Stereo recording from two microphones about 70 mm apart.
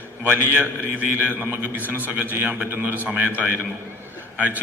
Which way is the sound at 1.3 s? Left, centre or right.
Right.